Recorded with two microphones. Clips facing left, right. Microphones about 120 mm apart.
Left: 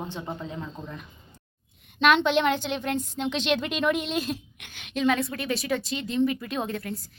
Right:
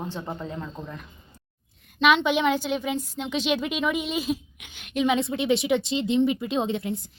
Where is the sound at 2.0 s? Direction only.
5° right (ahead or behind).